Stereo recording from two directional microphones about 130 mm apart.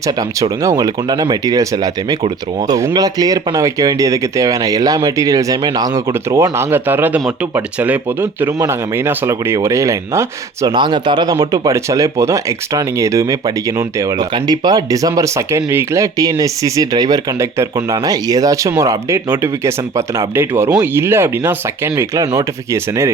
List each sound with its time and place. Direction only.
0.6 s speech: 30° right (ahead or behind)
10.8 s speech: 35° right (ahead or behind); by 23.0 s 20° right (ahead or behind)